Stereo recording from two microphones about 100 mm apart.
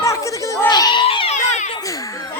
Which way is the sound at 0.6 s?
45° left (ahead or behind).